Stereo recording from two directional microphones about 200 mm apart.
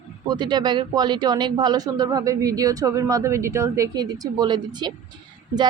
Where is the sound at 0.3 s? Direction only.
20° right (ahead or behind).